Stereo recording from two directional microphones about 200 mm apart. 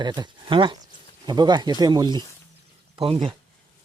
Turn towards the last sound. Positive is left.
turn(degrees=-25)  # may be behind; listen again after turning